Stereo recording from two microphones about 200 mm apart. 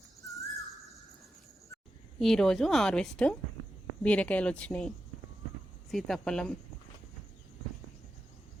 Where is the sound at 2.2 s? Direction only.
Centre (ahead or behind).